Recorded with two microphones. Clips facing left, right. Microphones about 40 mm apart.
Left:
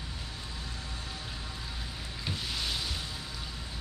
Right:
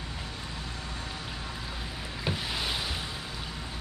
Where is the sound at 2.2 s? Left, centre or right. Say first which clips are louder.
Right 4 dB; centre.